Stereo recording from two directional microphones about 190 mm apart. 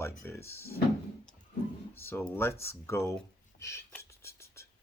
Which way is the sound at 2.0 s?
10° left (ahead or behind).